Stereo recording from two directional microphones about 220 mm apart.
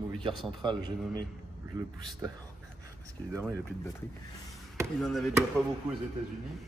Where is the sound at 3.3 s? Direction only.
15° right (ahead or behind).